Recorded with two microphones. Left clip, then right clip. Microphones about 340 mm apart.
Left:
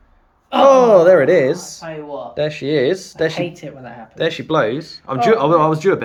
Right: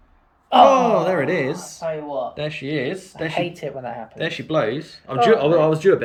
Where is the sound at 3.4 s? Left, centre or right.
Centre.